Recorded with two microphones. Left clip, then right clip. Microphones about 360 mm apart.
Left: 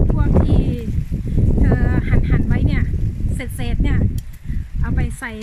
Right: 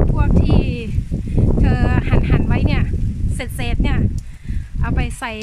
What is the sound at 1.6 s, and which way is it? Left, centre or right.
A woman's voice, centre.